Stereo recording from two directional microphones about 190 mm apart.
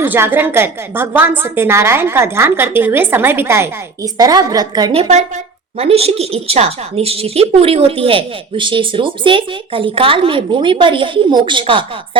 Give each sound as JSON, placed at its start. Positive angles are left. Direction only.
{"t": 0.0, "sound": "a woman's voice", "side_deg": -10}